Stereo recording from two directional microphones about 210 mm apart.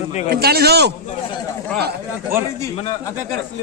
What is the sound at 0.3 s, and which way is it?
Speech, 50° right (ahead or behind).